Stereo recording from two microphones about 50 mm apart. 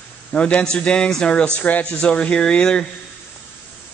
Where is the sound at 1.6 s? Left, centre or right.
Left.